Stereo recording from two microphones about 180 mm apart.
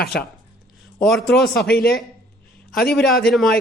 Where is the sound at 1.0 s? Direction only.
Centre (ahead or behind).